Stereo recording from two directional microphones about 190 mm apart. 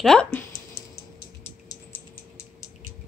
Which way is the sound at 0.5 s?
60° left (ahead or behind).